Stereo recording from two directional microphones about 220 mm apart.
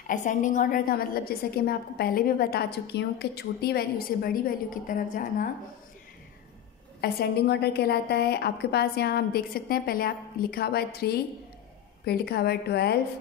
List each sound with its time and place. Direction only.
0.0 s a woman's voice: 35° left (ahead or behind)
7.0 s a woman's voice: 45° left (ahead or behind)